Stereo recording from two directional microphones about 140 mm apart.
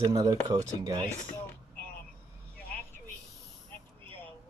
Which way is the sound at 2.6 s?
10° left (ahead or behind).